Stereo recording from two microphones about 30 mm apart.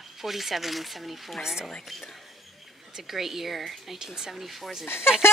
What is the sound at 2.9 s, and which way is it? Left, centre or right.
Speech, centre.